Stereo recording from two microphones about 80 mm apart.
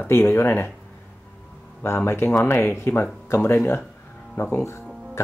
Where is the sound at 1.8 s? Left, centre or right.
Left.